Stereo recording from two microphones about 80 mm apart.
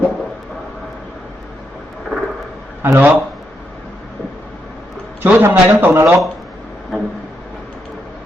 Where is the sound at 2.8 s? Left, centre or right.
Right.